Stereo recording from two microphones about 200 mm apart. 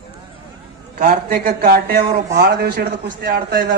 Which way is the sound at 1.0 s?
50° right (ahead or behind).